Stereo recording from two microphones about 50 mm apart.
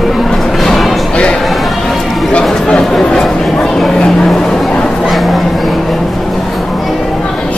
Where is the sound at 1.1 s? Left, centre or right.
Left.